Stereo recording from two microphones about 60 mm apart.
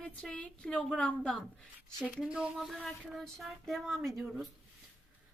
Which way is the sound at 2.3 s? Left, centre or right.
Centre.